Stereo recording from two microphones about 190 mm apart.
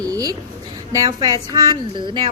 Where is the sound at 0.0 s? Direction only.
20° right (ahead or behind).